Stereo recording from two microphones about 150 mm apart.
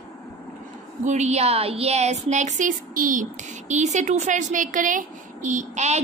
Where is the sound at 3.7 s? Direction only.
50° right (ahead or behind).